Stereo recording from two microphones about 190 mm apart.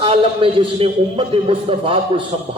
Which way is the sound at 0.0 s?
30° right (ahead or behind).